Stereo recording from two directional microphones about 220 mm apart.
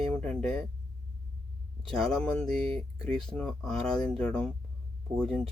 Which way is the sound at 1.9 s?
5° left (ahead or behind).